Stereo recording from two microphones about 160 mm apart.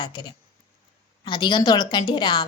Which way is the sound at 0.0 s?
30° left (ahead or behind).